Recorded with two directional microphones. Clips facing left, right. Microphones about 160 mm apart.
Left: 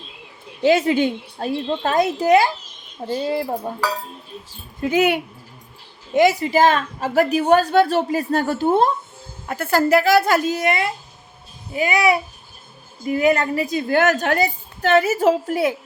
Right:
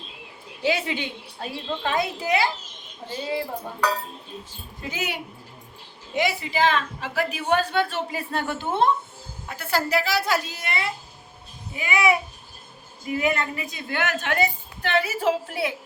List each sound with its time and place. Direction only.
0.6 s a woman's voice: 45° left (ahead or behind)
4.8 s speech: 60° left (ahead or behind)
6.1 s a woman's voice: 45° left (ahead or behind)